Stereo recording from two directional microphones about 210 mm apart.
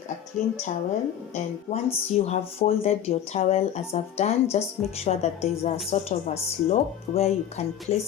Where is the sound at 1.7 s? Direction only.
25° left (ahead or behind).